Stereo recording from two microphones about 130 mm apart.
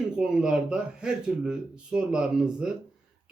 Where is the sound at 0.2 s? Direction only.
5° right (ahead or behind).